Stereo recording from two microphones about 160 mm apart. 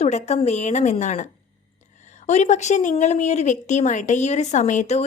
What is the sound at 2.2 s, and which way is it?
Speech, 45° left (ahead or behind).